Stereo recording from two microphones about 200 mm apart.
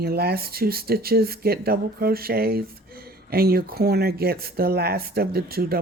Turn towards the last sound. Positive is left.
turn(degrees=-50)  # may be behind; listen again after turning